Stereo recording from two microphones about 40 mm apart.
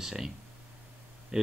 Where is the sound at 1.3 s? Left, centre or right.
Centre.